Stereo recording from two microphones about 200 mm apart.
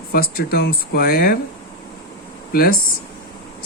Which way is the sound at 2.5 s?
45° left (ahead or behind).